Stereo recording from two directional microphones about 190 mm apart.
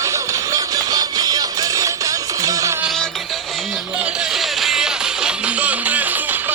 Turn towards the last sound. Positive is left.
turn(degrees=-10)  # may be behind; listen again after turning